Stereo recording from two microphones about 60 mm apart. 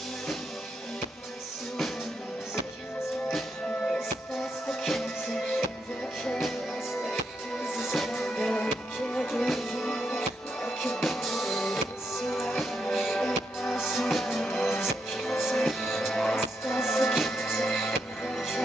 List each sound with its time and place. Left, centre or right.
3.8 s music: centre
4.6 s music: centre
9.5 s music: centre